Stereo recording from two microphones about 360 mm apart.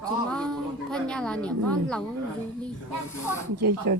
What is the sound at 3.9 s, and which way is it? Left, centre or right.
Speech, right.